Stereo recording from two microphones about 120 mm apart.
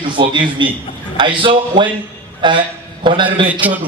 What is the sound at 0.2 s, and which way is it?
A man's voice, 40° right (ahead or behind).